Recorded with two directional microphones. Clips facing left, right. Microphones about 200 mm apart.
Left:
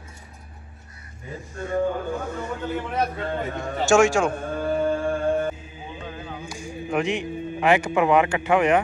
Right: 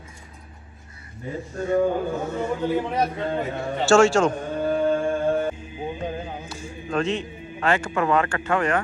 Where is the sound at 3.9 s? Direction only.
15° left (ahead or behind).